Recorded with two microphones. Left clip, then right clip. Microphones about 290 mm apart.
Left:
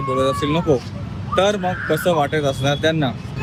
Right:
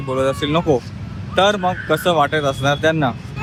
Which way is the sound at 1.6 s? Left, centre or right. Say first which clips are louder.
Right 2 dB; centre.